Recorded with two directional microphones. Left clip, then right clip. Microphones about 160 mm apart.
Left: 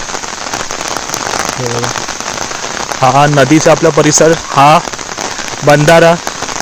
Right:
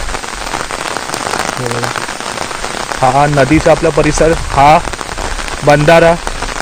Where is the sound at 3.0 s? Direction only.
30° left (ahead or behind).